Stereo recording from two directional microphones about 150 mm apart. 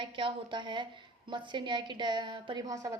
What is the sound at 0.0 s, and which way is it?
A woman's voice, 35° right (ahead or behind).